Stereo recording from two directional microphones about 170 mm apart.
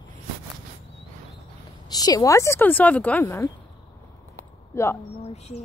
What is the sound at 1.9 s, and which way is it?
Speech, 25° left (ahead or behind).